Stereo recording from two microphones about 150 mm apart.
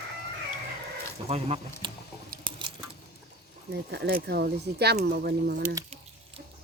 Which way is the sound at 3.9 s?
90° right.